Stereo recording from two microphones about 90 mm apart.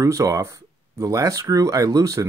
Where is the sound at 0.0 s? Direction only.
40° right (ahead or behind).